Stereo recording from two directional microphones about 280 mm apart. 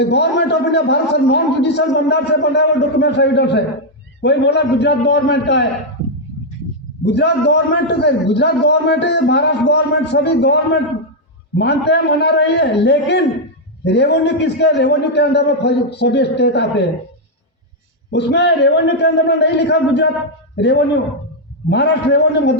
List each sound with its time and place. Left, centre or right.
0.0 s a man's voice: left
7.0 s a man's voice: left
18.1 s a man's voice: left